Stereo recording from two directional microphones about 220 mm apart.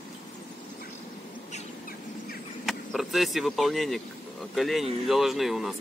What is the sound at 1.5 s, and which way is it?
Bird, 35° left (ahead or behind).